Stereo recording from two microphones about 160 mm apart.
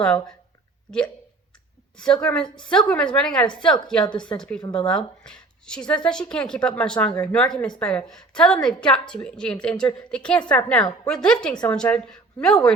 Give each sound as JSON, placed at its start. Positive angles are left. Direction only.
{"t": 0.0, "sound": "speech", "side_deg": 5}
{"t": 2.2, "sound": "speech", "side_deg": 5}
{"t": 4.6, "sound": "speech", "side_deg": 30}
{"t": 4.9, "sound": "speech", "side_deg": 5}